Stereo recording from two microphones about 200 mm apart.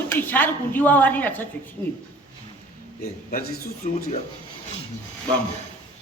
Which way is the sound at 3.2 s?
45° left (ahead or behind).